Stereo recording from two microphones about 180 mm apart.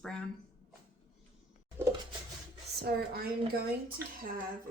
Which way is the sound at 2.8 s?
65° right (ahead or behind).